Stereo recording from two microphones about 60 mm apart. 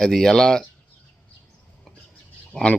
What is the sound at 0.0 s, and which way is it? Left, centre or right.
Speech, centre.